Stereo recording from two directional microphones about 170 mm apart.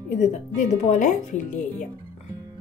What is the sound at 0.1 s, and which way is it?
Speech, 45° left (ahead or behind).